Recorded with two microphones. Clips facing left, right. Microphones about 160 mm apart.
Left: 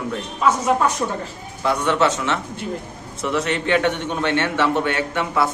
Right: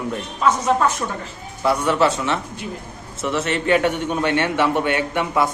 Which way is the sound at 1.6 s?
5° right (ahead or behind).